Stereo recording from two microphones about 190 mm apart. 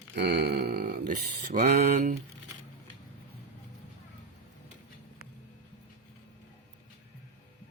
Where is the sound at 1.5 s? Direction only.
35° right (ahead or behind).